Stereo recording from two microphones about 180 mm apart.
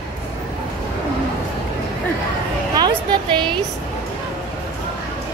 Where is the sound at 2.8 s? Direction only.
25° right (ahead or behind).